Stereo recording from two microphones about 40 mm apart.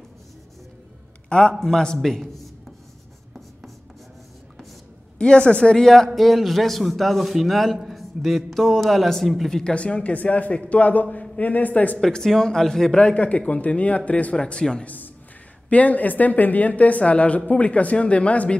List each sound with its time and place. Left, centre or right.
1.6 s speech: centre
2.1 s a sound: centre
5.2 s a woman's voice: left
6.1 s a man's voice: centre
9.5 s speech: centre
9.8 s a woman's voice: left
12.0 s speech: centre
12.9 s speech: left
14.3 s a woman's voice: left
15.7 s speech: left